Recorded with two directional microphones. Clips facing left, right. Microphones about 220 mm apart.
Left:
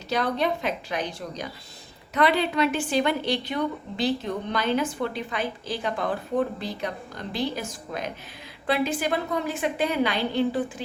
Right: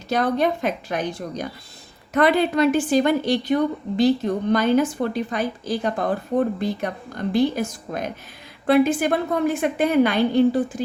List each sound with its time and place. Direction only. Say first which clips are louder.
0.1 s a woman's voice: right 5 dB; 50° right (ahead or behind)